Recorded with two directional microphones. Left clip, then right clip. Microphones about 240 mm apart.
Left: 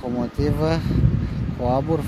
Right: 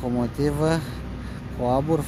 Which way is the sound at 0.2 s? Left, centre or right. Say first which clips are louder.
Left 1 dB; centre.